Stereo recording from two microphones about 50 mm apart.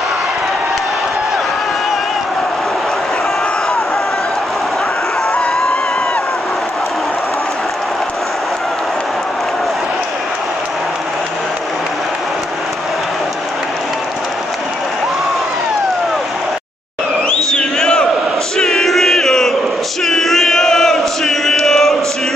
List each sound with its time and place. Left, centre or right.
17.6 s crowd: centre
18.6 s battle cry: centre
20.1 s chant: centre